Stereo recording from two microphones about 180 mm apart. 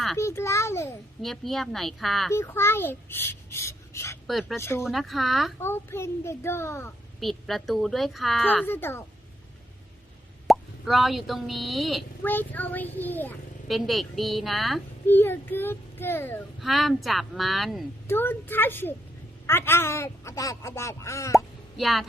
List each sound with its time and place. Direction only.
0.2 s a child's voice: 15° left (ahead or behind)
1.2 s a woman's voice: centre (ahead or behind)
2.3 s a child's voice: 15° left (ahead or behind)
4.3 s a woman's voice: centre (ahead or behind)
4.5 s a child's voice: 15° left (ahead or behind)
4.9 s a woman's voice: centre (ahead or behind)
5.5 s a child's voice: 15° left (ahead or behind)
7.2 s a woman's voice: centre (ahead or behind)
10.4 s speech: centre (ahead or behind)
12.2 s a child's voice: 10° left (ahead or behind)
15.0 s a child's voice: 10° left (ahead or behind)
16.6 s a woman's voice: centre (ahead or behind)
18.1 s a child's voice: 10° left (ahead or behind)
21.3 s plop: centre (ahead or behind)